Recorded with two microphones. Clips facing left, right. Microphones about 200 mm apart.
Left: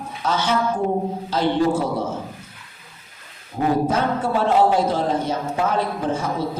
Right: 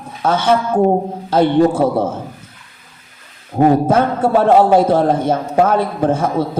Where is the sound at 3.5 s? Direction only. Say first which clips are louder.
Right 8 dB; 55° right (ahead or behind).